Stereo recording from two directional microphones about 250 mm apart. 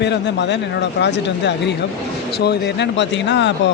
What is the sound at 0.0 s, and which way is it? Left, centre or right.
Speech, left.